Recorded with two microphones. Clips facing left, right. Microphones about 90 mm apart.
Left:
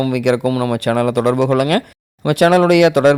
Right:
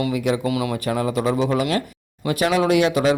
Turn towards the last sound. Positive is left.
turn(degrees=65)  # may be behind; listen again after turning